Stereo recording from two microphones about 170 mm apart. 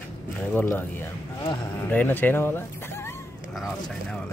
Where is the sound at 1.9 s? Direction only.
10° left (ahead or behind).